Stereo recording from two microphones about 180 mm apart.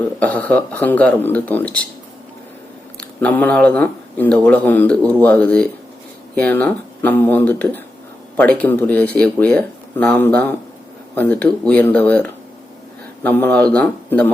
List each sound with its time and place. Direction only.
0.2 s speech: 10° left (ahead or behind)
3.0 s speech: 10° left (ahead or behind)